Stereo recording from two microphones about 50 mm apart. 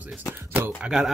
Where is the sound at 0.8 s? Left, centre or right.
Centre.